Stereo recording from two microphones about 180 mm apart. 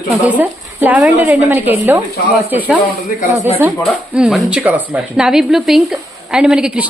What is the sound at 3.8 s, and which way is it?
A woman's voice, centre (ahead or behind).